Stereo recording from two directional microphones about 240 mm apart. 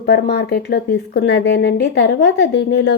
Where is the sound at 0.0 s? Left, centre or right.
Left.